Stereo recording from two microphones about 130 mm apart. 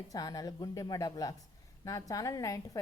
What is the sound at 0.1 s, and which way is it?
A woman's voice, 30° left (ahead or behind).